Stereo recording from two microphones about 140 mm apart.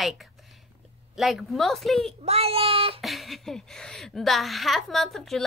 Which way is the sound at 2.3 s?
45° right (ahead or behind).